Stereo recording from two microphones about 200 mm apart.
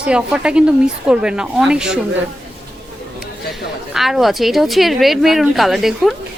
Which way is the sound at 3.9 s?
Centre (ahead or behind).